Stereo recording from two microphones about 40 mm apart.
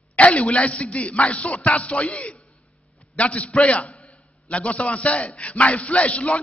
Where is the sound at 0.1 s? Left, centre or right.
Left.